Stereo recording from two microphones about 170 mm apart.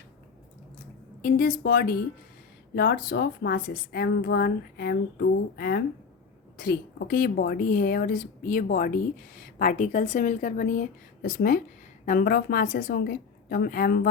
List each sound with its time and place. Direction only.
1.2 s a woman's voice: 60° left (ahead or behind)